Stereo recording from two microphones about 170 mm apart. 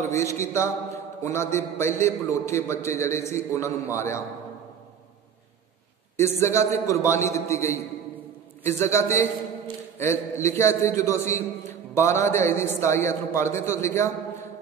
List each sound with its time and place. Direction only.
0.0 s a man's voice: 15° left (ahead or behind)
6.1 s a man's voice: 15° left (ahead or behind)